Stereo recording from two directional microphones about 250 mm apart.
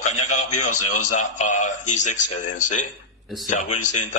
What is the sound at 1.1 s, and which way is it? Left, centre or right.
A man's voice, left.